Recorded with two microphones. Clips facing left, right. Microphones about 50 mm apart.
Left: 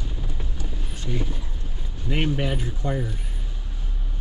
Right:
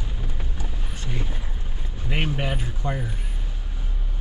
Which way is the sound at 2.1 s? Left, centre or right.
Right.